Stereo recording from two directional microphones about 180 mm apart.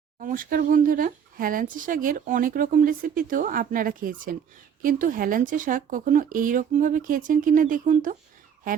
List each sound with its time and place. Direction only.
0.2 s speech: 50° right (ahead or behind)